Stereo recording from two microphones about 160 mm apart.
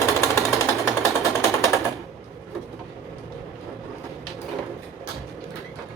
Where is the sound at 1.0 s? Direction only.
20° left (ahead or behind).